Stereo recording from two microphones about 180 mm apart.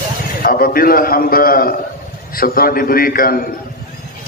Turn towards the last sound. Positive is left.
turn(degrees=55)  # may be behind; listen again after turning